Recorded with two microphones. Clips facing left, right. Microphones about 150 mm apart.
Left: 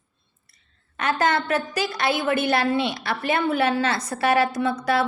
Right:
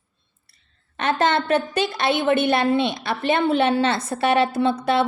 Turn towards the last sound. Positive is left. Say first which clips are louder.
# right 3 dB
turn(degrees=-25)  # may be behind; listen again after turning